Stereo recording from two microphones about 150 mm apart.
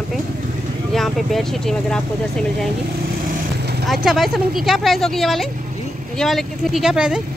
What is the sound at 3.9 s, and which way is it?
Speech, centre (ahead or behind).